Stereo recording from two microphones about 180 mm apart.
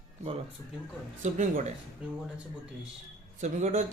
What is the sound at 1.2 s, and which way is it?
Speech, 40° right (ahead or behind).